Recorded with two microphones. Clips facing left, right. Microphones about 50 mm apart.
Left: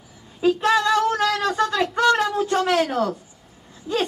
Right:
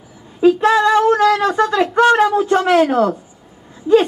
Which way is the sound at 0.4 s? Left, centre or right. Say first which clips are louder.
Right 6 dB; right.